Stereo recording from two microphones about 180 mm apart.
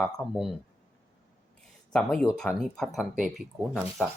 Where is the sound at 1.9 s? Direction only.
5° left (ahead or behind).